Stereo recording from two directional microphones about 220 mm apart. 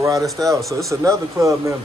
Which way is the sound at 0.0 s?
15° right (ahead or behind).